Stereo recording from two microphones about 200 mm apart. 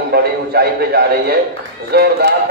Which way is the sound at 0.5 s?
50° right (ahead or behind).